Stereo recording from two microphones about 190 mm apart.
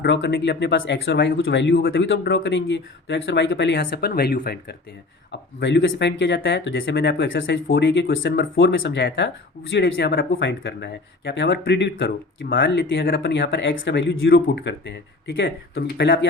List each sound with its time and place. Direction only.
0.0 s speech: 65° left (ahead or behind)